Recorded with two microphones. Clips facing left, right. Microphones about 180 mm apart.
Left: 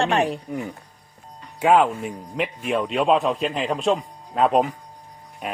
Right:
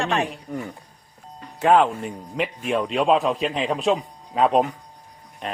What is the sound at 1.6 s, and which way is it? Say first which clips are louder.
A man's voice: even; 5° left (ahead or behind).